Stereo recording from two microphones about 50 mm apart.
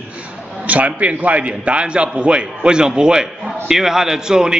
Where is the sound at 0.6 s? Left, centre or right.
Right.